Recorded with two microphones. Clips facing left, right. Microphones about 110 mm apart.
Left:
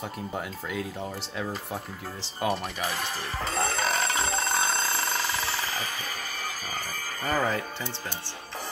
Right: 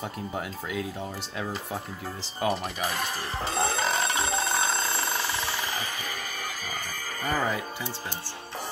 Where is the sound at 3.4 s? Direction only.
25° right (ahead or behind).